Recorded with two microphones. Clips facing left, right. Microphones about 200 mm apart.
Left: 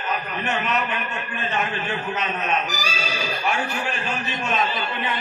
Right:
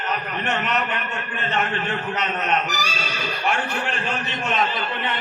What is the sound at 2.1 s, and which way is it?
A man's voice, 70° right (ahead or behind).